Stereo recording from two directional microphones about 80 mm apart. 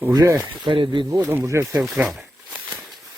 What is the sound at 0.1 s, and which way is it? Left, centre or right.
Speech, right.